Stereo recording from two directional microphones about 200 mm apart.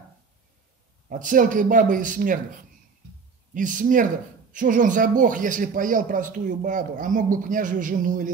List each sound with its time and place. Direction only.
1.0 s speech: 40° right (ahead or behind)
3.5 s speech: 40° right (ahead or behind)